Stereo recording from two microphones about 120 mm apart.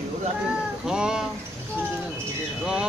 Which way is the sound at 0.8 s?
5° right (ahead or behind).